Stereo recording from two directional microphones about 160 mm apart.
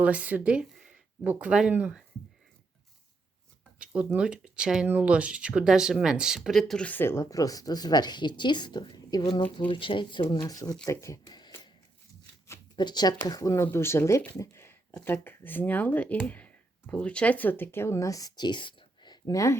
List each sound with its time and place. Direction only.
0.0 s speech: 10° right (ahead or behind)
3.8 s speech: 5° right (ahead or behind); by 11.5 s 25° left (ahead or behind)
12.7 s speech: 25° left (ahead or behind)